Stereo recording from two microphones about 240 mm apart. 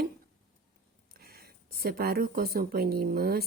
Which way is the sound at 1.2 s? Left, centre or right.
Right.